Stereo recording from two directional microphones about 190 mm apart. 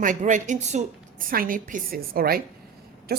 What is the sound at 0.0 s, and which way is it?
Speech, 40° right (ahead or behind).